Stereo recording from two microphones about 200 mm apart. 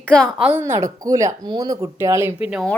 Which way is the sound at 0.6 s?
15° right (ahead or behind).